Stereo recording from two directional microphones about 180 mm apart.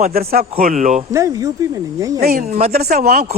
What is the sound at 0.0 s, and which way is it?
Speech, 55° right (ahead or behind).